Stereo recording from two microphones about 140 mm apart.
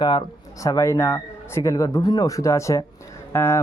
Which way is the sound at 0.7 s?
25° left (ahead or behind).